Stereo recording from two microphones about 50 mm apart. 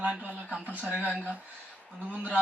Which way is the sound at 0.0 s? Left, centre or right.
Right.